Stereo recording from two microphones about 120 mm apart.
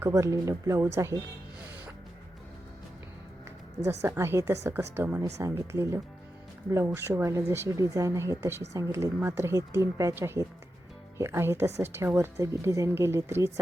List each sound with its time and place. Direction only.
0.0 s a woman's voice: 25° right (ahead or behind)
3.8 s a woman's voice: 20° right (ahead or behind)